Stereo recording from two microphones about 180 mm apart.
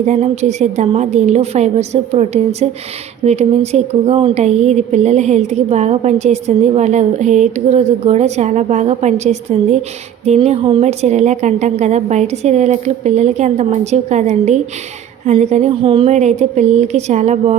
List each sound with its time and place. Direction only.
0.0 s speech: 40° right (ahead or behind)